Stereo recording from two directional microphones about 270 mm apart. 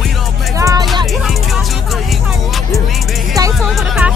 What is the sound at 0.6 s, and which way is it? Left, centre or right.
Music, centre.